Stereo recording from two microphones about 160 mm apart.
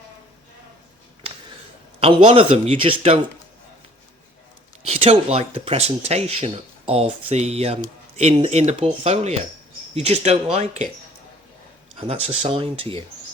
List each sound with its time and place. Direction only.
2.0 s speech: 35° right (ahead or behind)
4.9 s speech: 40° right (ahead or behind)
11.9 s speech: 40° right (ahead or behind)